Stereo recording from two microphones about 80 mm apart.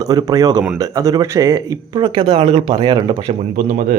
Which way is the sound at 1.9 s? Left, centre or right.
Right.